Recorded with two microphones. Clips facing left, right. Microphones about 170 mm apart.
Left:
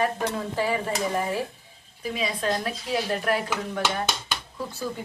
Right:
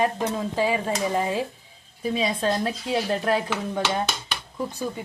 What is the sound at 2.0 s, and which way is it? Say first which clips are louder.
Speech: right 4 dB; 30° right (ahead or behind).